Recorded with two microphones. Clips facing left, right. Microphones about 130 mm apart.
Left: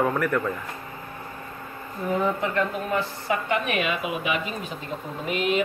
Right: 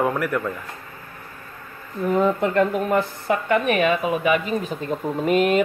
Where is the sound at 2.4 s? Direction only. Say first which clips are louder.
Right 6 dB; 45° right (ahead or behind).